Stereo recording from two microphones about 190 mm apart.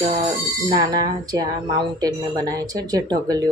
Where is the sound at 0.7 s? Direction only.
20° right (ahead or behind).